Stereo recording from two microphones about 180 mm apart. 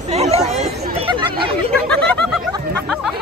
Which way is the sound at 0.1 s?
35° right (ahead or behind).